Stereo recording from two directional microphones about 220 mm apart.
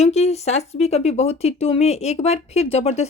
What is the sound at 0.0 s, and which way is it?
Speech, 30° left (ahead or behind).